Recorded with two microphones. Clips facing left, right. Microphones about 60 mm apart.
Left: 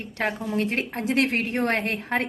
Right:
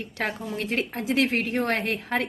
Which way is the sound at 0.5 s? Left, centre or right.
Left.